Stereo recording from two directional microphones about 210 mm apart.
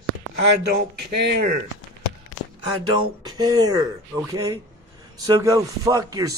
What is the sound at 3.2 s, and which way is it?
Speech, 20° right (ahead or behind).